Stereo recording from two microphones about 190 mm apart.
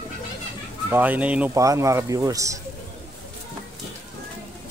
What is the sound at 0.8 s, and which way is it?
Speech, 10° right (ahead or behind).